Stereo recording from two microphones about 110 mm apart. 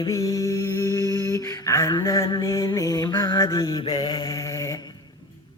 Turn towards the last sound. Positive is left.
turn(degrees=30)  # may be behind; listen again after turning